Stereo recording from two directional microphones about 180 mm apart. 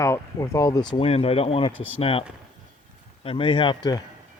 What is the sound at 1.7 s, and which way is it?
Speech, 90° left.